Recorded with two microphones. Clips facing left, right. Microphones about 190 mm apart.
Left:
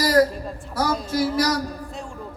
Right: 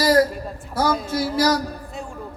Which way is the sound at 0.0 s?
25° right (ahead or behind).